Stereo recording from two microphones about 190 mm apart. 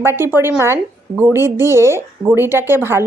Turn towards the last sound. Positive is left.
turn(degrees=-10)  # may be behind; listen again after turning